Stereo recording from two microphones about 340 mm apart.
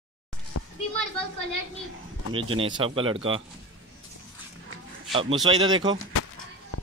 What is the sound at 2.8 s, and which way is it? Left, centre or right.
Speech, centre.